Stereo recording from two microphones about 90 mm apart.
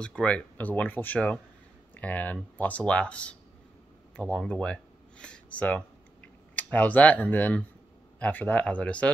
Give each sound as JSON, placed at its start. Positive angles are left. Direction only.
{"t": 0.0, "sound": "speech", "side_deg": 10}
{"t": 4.5, "sound": "speech", "side_deg": 10}